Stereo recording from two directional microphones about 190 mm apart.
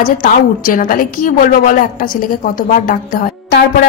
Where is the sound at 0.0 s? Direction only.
45° left (ahead or behind).